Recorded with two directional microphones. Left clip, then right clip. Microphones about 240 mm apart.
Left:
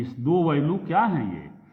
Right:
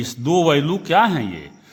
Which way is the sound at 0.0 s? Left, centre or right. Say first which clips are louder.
Right 6 dB; right.